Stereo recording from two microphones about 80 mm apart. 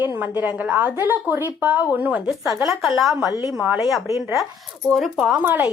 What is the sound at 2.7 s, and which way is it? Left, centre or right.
Speech, centre.